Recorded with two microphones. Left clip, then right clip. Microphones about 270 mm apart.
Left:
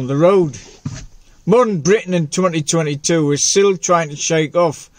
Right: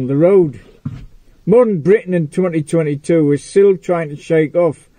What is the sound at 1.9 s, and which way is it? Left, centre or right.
Speech, left.